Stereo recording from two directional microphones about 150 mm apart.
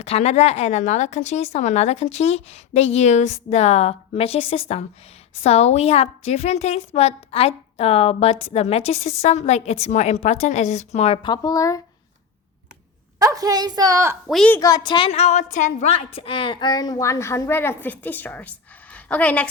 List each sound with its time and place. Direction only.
0.0 s speech: 45° left (ahead or behind)
11.2 s a woman's voice: 25° left (ahead or behind)
13.1 s a woman's voice: 25° right (ahead or behind)
14.3 s a woman's voice: centre (ahead or behind)
14.5 s a woman's voice: 25° left (ahead or behind)
15.1 s a woman's voice: 50° left (ahead or behind); by 19.5 s 10° left (ahead or behind)